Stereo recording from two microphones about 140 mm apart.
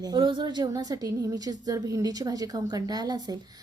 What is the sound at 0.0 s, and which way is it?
A woman's voice, 30° right (ahead or behind).